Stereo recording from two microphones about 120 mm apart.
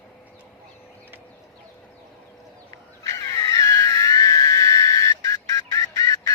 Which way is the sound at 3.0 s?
25° left (ahead or behind).